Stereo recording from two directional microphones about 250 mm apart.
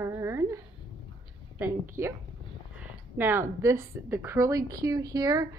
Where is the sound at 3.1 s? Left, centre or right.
Centre.